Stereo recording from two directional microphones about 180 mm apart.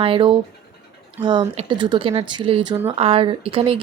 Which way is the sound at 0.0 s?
30° right (ahead or behind).